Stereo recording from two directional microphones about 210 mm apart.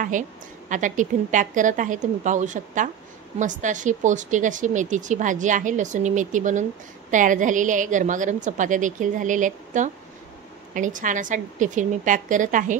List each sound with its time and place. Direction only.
0.7 s speech: 35° right (ahead or behind)